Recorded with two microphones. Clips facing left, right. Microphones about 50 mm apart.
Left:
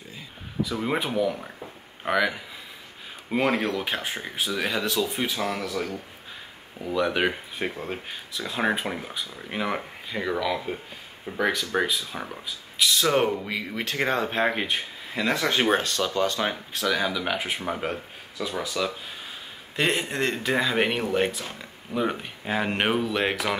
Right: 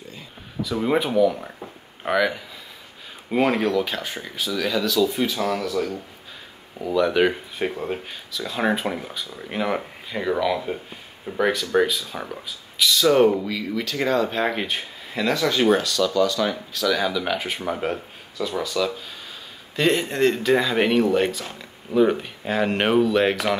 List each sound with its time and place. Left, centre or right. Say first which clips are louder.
0.7 s speech: right 7 dB; centre
3.7 s speech: right 4 dB; left
6.8 s speech: right 5 dB; centre
7.6 s speech: right 5 dB; centre
8.1 s speech: right 2 dB; centre
13.0 s speech: right 8 dB; left
14.4 s speech: right 1 dB; centre
15.3 s speech: right 4 dB; left
17.0 s speech: right 3 dB; centre
18.5 s speech: right 4 dB; left; by 21.0 s centre
21.4 s speech: right 1 dB; centre